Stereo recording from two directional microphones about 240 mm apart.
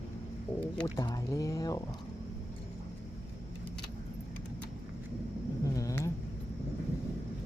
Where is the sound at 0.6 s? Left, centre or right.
Centre.